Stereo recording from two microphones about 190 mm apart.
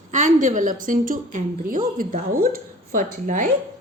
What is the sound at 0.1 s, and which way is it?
A woman's voice, 40° right (ahead or behind).